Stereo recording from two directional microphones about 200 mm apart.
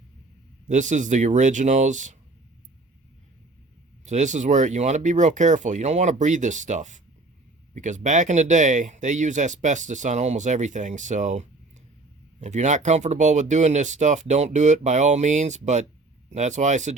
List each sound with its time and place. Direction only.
0.7 s speech: 40° right (ahead or behind)
4.0 s speech: 35° right (ahead or behind)